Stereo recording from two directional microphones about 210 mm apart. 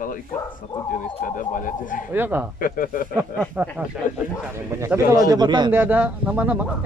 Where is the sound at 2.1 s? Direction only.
10° right (ahead or behind).